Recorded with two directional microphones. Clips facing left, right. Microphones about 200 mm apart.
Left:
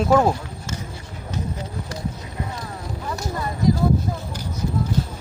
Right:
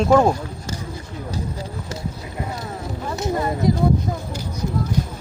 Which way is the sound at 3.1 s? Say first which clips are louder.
Right 6 dB; 25° right (ahead or behind).